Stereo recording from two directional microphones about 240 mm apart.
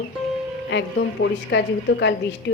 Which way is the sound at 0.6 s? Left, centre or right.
Left.